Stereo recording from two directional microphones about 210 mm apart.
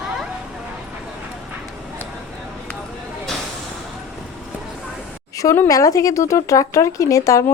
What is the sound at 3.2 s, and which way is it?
Vehicle, centre (ahead or behind).